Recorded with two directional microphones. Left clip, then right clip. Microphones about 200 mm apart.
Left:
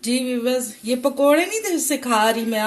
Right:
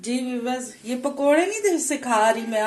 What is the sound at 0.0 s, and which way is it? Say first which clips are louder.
Speech: left 5 dB; 45° left (ahead or behind).